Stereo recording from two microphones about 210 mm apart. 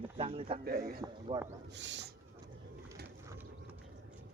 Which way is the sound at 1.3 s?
30° right (ahead or behind).